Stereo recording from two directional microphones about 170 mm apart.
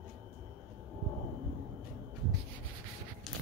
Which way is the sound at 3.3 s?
Centre (ahead or behind).